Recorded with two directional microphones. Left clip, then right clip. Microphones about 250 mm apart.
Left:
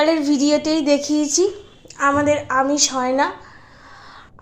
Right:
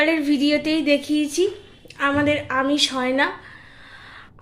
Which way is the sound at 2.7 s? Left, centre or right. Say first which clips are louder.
Left 1 dB; centre.